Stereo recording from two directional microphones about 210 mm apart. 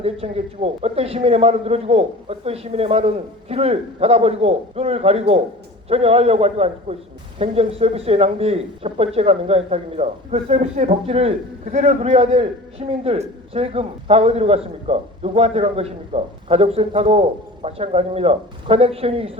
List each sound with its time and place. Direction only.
0.0 s a man's voice: 30° right (ahead or behind)